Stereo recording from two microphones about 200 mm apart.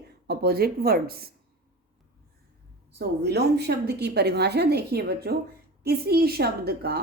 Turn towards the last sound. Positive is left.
turn(degrees=-50)  # may be behind; listen again after turning